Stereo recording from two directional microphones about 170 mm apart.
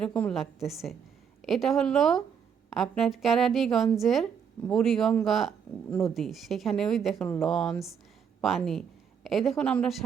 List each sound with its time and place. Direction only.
0.0 s speech: 5° left (ahead or behind)